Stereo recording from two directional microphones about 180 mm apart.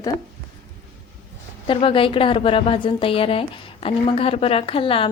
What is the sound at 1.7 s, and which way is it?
A woman's voice, 30° left (ahead or behind).